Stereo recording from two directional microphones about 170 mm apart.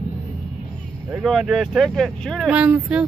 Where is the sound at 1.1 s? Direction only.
10° right (ahead or behind).